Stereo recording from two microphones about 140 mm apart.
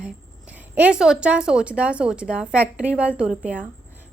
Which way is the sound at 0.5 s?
10° right (ahead or behind).